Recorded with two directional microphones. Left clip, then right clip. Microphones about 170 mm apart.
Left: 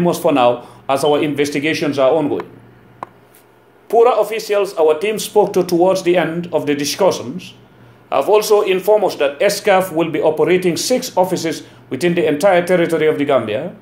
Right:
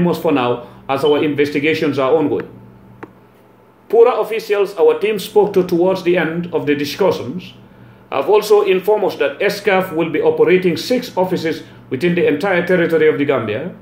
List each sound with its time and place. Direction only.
0.0 s speech: 40° left (ahead or behind)
3.9 s speech: 40° left (ahead or behind)